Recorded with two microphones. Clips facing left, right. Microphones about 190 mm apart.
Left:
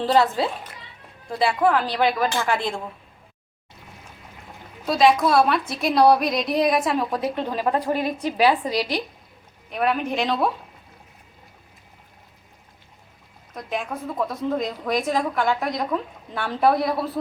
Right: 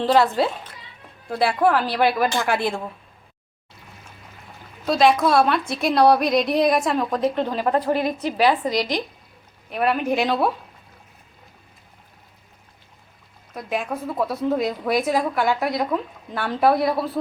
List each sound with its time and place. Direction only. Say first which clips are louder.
0.0 s a woman's voice: right 2 dB; centre (ahead or behind)
4.9 s a woman's voice: right 1 dB; centre (ahead or behind)
7.7 s a woman's voice: right 2 dB; 35° right (ahead or behind)
8.7 s speech: right 1 dB; 10° left (ahead or behind)
9.6 s a woman's voice: right 2 dB; centre (ahead or behind)
13.5 s a woman's voice: right 2 dB; 5° right (ahead or behind)